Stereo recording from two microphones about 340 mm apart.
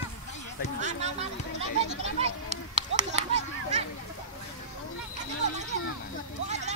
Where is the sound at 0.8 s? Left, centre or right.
Centre.